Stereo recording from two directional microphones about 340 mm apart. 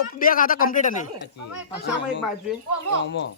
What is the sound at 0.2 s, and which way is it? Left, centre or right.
Speech, left.